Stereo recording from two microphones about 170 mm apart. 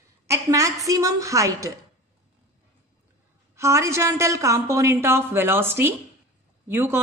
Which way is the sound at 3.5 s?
15° right (ahead or behind).